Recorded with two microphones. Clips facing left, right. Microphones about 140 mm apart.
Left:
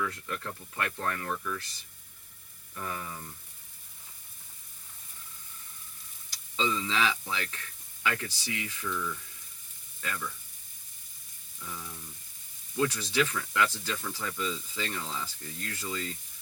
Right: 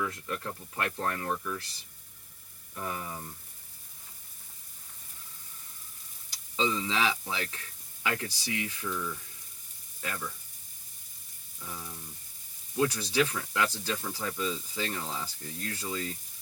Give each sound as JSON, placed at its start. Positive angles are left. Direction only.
{"t": 0.0, "sound": "speech", "side_deg": -20}
{"t": 2.7, "sound": "speech", "side_deg": -20}
{"t": 6.6, "sound": "speech", "side_deg": -15}
{"t": 11.6, "sound": "speech", "side_deg": -15}